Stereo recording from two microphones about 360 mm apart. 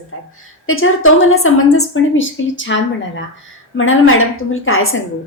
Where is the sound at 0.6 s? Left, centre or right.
Left.